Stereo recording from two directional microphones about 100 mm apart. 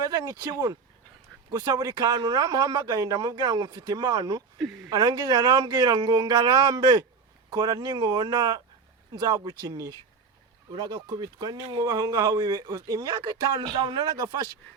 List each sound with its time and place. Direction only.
0.0 s speech: 40° right (ahead or behind)